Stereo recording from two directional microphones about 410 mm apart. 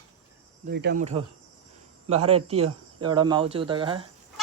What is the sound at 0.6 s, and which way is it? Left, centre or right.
Speech, right.